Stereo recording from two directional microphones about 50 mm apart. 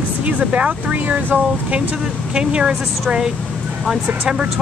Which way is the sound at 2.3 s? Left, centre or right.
Centre.